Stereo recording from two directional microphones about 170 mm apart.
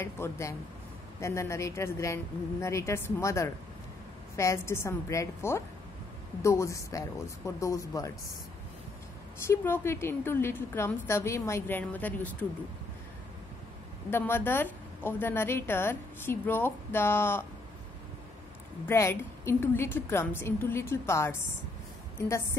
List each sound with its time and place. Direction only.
0.0 s a woman's voice: 15° left (ahead or behind)
9.5 s a woman's voice: 15° left (ahead or behind)
14.1 s a woman's voice: 15° left (ahead or behind)
18.9 s a woman's voice: 15° left (ahead or behind)